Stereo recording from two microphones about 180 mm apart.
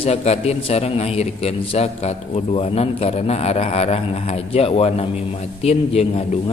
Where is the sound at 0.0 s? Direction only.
35° left (ahead or behind).